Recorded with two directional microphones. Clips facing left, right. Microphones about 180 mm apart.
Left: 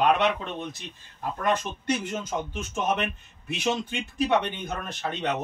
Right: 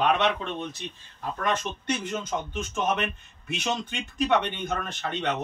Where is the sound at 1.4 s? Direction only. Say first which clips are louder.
Left 2 dB; 10° left (ahead or behind).